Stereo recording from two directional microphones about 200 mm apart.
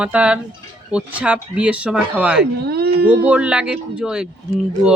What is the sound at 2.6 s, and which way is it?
Speech, 50° right (ahead or behind).